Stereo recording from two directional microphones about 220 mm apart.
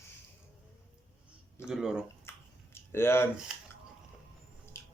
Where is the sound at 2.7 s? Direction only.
10° left (ahead or behind).